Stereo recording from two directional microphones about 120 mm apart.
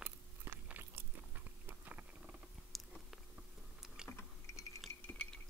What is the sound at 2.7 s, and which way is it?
Biting, centre (ahead or behind).